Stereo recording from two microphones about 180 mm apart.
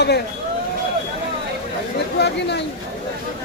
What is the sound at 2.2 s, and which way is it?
Speech, 65° left (ahead or behind).